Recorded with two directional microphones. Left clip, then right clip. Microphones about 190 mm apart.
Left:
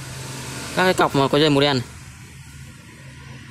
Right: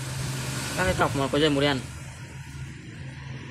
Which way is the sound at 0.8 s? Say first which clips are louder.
Left 8 dB; 55° left (ahead or behind).